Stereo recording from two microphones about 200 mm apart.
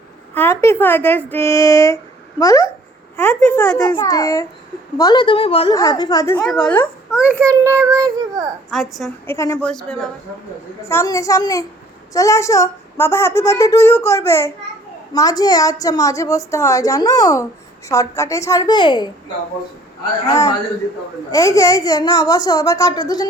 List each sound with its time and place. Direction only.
0.3 s speech: 10° left (ahead or behind)
3.8 s a child's voice: 20° left (ahead or behind)
5.7 s speech: 15° left (ahead or behind)
6.4 s a child's voice: 5° left (ahead or behind)
7.2 s a child's voice: 10° right (ahead or behind)
8.7 s a child's voice: centre (ahead or behind)
9.2 s speech: 15° left (ahead or behind)
10.8 s speech: 15° left (ahead or behind)
20.2 s a child's voice: 20° left (ahead or behind)